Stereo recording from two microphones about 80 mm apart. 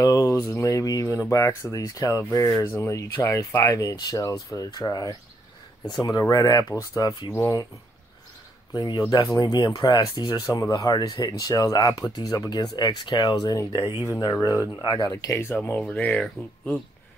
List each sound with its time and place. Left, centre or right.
0.0 s speech: left
6.7 s speech: left
8.7 s speech: left
12.7 s speech: left
13.7 s speech: right
14.4 s speech: left
14.8 s speech: left
15.2 s speech: left